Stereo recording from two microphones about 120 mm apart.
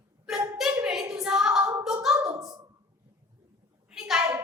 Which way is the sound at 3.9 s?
5° right (ahead or behind).